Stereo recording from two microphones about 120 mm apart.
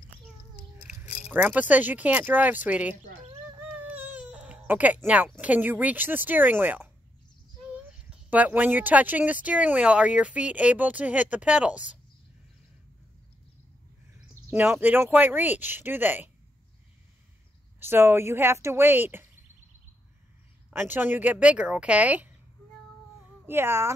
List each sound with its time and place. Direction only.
1.3 s speech: 15° right (ahead or behind)
8.3 s speech: 15° right (ahead or behind)
14.5 s speech: 20° right (ahead or behind)
17.7 s speech: 20° right (ahead or behind)
20.7 s speech: 15° right (ahead or behind)
23.4 s speech: 20° right (ahead or behind)